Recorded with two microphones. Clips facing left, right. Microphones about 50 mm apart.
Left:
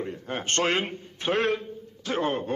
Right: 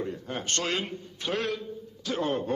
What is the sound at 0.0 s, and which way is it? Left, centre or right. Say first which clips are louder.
A man's voice: left 1 dB; left.